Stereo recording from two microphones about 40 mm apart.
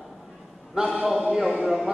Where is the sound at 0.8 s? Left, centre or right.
Centre.